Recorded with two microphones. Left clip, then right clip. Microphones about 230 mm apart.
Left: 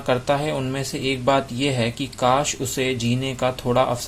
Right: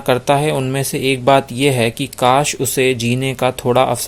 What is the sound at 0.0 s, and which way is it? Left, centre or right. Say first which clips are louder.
Speech: right 7 dB; right.